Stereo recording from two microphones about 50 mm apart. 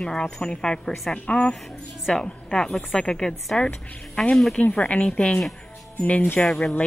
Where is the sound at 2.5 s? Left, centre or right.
Centre.